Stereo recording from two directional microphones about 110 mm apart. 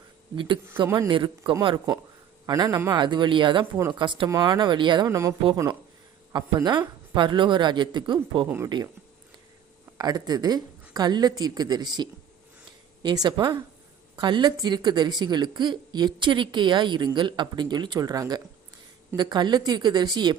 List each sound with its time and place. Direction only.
0.3 s speech: 50° right (ahead or behind)
2.5 s speech: 35° right (ahead or behind)
4.3 s a woman's voice: 35° right (ahead or behind)
5.0 s speech: 30° right (ahead or behind)
6.3 s speech: 45° right (ahead or behind)
8.4 s speech: 20° right (ahead or behind)
10.0 s a woman's voice: 35° right (ahead or behind)